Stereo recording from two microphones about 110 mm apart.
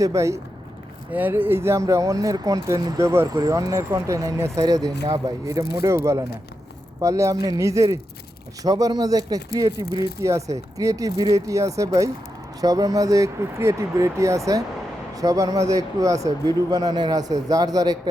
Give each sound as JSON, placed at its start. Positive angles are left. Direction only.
{"t": 0.0, "sound": "speech", "side_deg": -30}
{"t": 1.1, "sound": "speech", "side_deg": -15}